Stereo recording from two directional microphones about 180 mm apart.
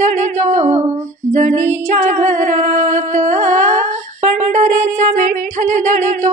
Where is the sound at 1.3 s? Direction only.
45° right (ahead or behind).